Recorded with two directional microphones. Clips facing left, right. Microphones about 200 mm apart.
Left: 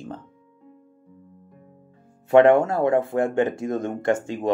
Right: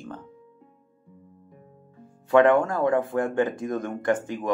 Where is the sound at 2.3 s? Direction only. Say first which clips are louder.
Left 3 dB; 25° left (ahead or behind).